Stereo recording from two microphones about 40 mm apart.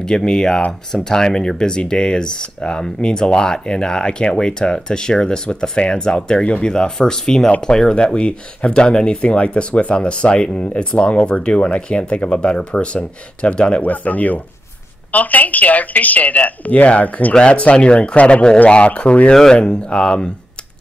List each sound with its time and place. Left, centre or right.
0.0 s speech: centre
13.8 s speech: left
17.3 s speech: left